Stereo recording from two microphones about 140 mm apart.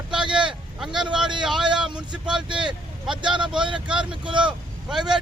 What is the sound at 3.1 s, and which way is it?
Speech, 35° right (ahead or behind).